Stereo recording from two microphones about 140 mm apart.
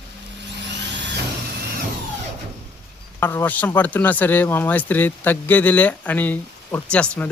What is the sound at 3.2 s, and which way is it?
Speech, 15° left (ahead or behind).